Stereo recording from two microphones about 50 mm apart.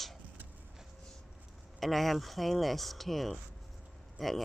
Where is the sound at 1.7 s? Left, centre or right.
Centre.